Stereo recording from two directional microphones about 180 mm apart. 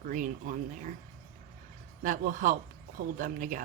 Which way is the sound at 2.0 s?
45° right (ahead or behind).